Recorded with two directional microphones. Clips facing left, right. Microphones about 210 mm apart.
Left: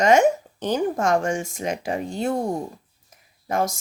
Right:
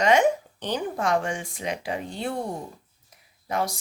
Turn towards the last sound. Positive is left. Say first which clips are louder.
# left 4 dB
turn(degrees=45)  # may be behind; listen again after turning